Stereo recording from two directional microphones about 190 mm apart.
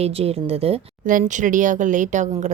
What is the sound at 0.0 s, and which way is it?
Speech, 30° right (ahead or behind).